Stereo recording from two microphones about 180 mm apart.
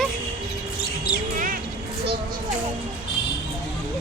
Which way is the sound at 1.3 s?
50° right (ahead or behind).